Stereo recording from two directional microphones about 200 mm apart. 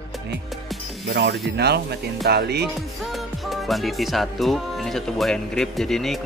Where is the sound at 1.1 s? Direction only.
55° right (ahead or behind).